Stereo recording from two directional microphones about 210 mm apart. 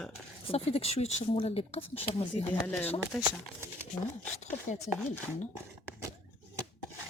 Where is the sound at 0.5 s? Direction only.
30° left (ahead or behind).